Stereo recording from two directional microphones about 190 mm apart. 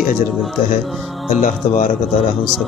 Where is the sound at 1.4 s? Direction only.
40° left (ahead or behind).